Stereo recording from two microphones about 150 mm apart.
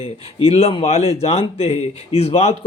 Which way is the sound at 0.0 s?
40° left (ahead or behind).